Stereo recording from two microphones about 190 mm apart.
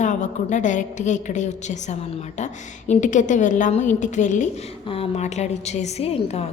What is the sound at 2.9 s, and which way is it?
A woman's voice, 40° left (ahead or behind).